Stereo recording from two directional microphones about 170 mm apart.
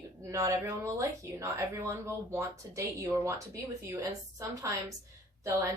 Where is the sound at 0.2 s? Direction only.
15° right (ahead or behind).